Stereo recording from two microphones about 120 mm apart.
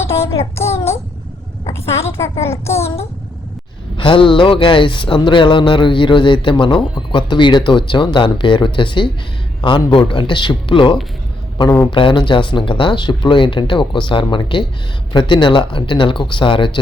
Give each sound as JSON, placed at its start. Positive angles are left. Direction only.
{"t": 0.0, "sound": "child singing", "side_deg": 20}
{"t": 2.0, "sound": "speech", "side_deg": 20}
{"t": 2.8, "sound": "a child's voice", "side_deg": 60}
{"t": 3.9, "sound": "speech", "side_deg": 45}